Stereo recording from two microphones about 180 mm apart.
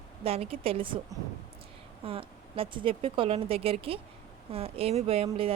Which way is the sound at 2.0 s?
30° right (ahead or behind).